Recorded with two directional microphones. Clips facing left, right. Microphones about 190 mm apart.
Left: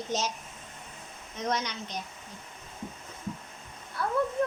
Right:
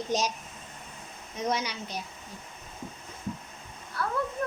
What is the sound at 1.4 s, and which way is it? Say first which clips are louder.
Speech: right 1 dB; 10° right (ahead or behind).